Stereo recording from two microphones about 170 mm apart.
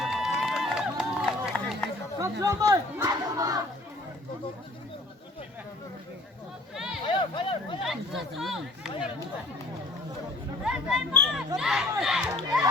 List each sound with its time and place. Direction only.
0.0 s run: centre (ahead or behind)
2.4 s battle cry: 20° right (ahead or behind)
6.7 s a sound: 5° right (ahead or behind)
7.0 s speech: 30° left (ahead or behind)
7.8 s speech: centre (ahead or behind)
10.6 s speech: 5° right (ahead or behind)
12.2 s battle cry: 20° right (ahead or behind)